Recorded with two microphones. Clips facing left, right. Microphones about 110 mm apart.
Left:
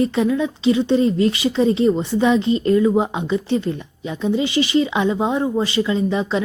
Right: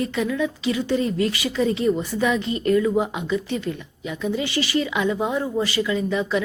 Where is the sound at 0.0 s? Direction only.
30° left (ahead or behind).